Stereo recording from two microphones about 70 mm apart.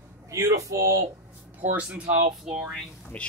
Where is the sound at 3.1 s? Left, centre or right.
Centre.